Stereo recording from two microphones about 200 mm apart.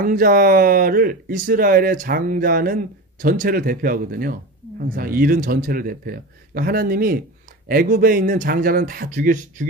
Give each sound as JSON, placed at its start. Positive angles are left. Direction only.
{"t": 0.0, "sound": "speech", "side_deg": -45}